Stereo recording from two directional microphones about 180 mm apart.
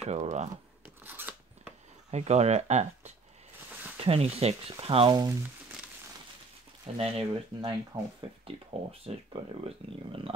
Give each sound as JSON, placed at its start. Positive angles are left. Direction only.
{"t": 0.0, "sound": "speech", "side_deg": -40}
{"t": 1.0, "sound": "scissors", "side_deg": -10}
{"t": 2.0, "sound": "speech", "side_deg": -35}
{"t": 7.0, "sound": "speech", "side_deg": -30}